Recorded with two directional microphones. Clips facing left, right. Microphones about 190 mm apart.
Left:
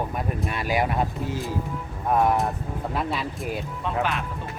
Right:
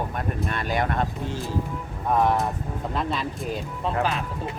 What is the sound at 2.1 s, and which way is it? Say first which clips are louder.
Speech: even; 5° left (ahead or behind).